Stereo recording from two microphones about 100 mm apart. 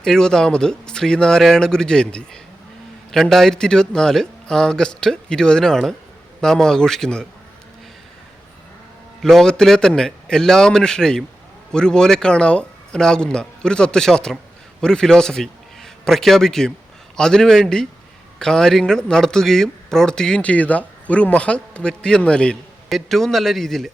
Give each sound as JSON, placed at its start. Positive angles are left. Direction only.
{"t": 0.0, "sound": "speech", "side_deg": 5}
{"t": 9.2, "sound": "a man's voice", "side_deg": 5}